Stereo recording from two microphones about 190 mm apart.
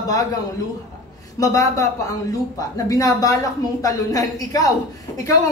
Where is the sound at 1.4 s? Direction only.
15° left (ahead or behind).